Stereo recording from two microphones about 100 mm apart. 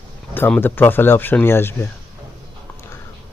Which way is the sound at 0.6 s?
20° left (ahead or behind).